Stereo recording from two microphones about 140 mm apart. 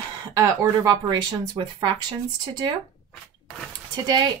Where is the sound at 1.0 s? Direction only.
30° right (ahead or behind).